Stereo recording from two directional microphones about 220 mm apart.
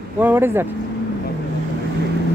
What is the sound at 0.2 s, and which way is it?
Speech, 10° right (ahead or behind).